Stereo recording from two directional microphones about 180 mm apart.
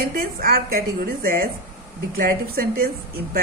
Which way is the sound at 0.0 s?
55° right (ahead or behind).